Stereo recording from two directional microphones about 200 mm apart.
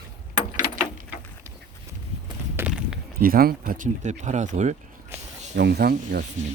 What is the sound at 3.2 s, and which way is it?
Speech, 45° right (ahead or behind).